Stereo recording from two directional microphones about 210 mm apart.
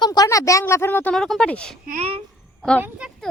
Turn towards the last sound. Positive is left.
turn(degrees=-5)  # may be behind; listen again after turning